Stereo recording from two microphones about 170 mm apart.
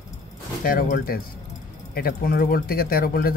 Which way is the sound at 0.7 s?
60° left (ahead or behind).